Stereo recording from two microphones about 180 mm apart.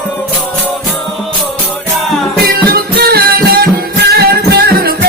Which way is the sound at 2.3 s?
60° right (ahead or behind).